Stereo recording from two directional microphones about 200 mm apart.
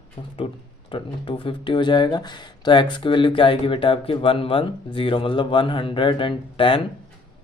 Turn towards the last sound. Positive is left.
turn(degrees=25)  # may be behind; listen again after turning